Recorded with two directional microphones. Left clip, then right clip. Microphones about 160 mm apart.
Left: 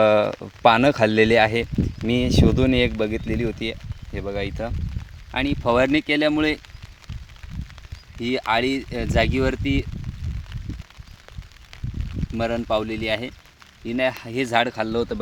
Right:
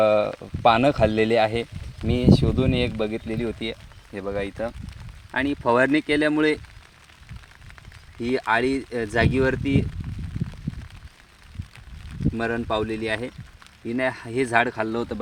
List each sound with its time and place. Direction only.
0.0 s speech: 70° left (ahead or behind); by 4.2 s 30° left (ahead or behind)
4.2 s speech: 20° left (ahead or behind)
8.2 s speech: 15° left (ahead or behind)
12.4 s speech: 20° left (ahead or behind)